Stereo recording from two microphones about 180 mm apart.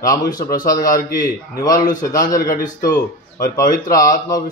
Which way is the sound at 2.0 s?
20° left (ahead or behind).